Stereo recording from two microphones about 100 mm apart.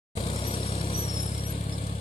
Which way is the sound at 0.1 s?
70° left (ahead or behind).